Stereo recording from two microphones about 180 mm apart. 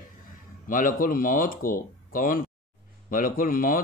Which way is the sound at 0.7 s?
50° left (ahead or behind).